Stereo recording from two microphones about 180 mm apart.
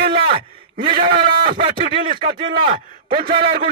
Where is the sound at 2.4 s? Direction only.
25° right (ahead or behind).